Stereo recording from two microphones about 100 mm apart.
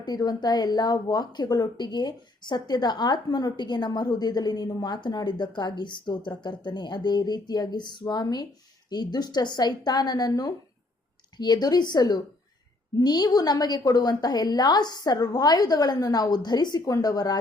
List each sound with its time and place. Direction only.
0.0 s a woman's voice: 40° left (ahead or behind)